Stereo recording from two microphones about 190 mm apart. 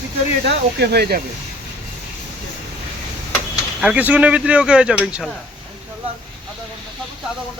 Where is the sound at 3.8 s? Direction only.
5° right (ahead or behind).